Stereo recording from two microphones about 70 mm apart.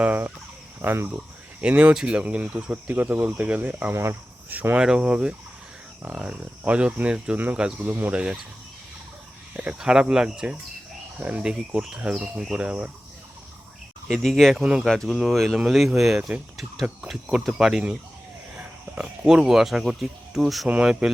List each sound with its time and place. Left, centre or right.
0.0 s speech: right
1.6 s speech: centre
3.9 s speech: right
4.4 s speech: right
4.8 s speech: centre
9.7 s speech: centre
11.5 s speech: centre
14.1 s speech: centre
14.6 s speech: centre
14.8 s speech: centre
18.5 s a sound: right
19.2 s speech: centre